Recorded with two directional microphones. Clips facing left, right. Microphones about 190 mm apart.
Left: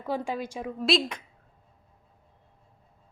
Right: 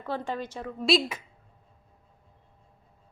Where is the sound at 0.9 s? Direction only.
5° right (ahead or behind).